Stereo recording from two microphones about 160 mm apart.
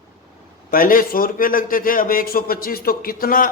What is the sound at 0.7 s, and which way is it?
A man's voice, 60° left (ahead or behind).